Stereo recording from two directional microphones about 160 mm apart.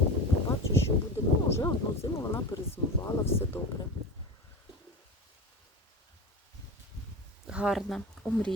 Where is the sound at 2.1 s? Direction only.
15° left (ahead or behind).